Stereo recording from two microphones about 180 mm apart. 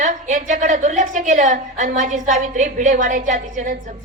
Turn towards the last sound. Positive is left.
turn(degrees=-45)  # may be behind; listen again after turning